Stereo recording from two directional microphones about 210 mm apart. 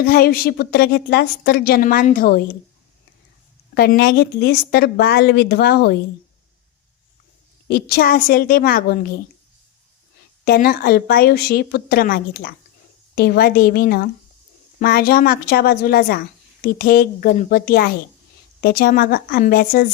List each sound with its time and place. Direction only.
0.1 s a woman's voice: 45° left (ahead or behind)
3.8 s a woman's voice: 50° left (ahead or behind)
7.7 s a woman's voice: 50° left (ahead or behind)
10.4 s a woman's voice: 45° left (ahead or behind)